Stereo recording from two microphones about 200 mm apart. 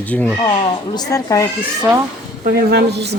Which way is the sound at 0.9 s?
15° left (ahead or behind).